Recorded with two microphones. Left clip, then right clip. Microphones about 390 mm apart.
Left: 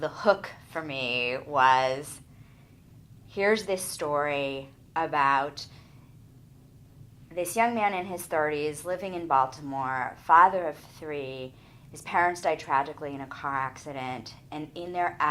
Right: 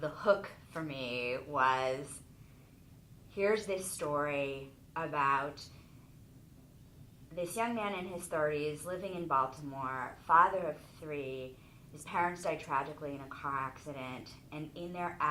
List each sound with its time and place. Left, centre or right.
0.0 s a woman's voice: left
3.3 s a woman's voice: left
7.3 s a woman's voice: left